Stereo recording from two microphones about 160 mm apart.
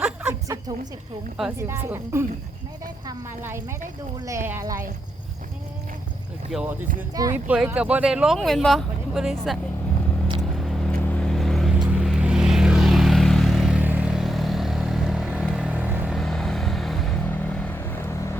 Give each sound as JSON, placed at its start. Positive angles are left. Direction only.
{"t": 0.0, "sound": "a sound", "side_deg": -10}
{"t": 1.5, "sound": "speech", "side_deg": -15}
{"t": 3.4, "sound": "speech", "side_deg": -15}
{"t": 6.5, "sound": "speech", "side_deg": -5}
{"t": 7.1, "sound": "speech", "side_deg": -20}
{"t": 7.3, "sound": "speech", "side_deg": -10}
{"t": 10.6, "sound": "vehicle", "side_deg": 0}
{"t": 16.1, "sound": "vehicle", "side_deg": 5}